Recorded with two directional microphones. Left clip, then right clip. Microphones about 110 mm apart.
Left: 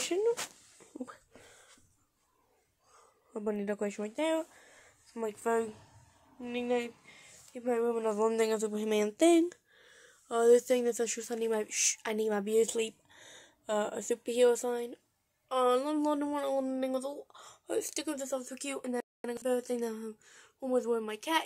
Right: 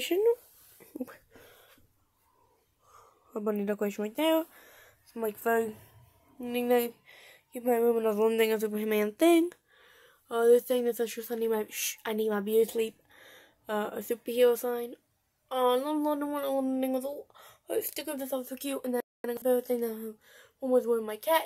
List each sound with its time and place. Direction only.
0.0 s speech: 25° right (ahead or behind)
0.7 s a sound: 25° right (ahead or behind)
2.9 s speech: 20° right (ahead or behind)
6.4 s speech: 40° right (ahead or behind)
8.1 s a man's voice: 15° right (ahead or behind)
8.5 s speech: 5° right (ahead or behind)
10.2 s speech: 30° left (ahead or behind)
13.1 s speech: 10° left (ahead or behind)
15.4 s speech: 30° left (ahead or behind)
16.3 s speech: 20° left (ahead or behind)